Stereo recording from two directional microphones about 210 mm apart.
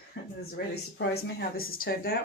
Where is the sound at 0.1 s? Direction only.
55° left (ahead or behind).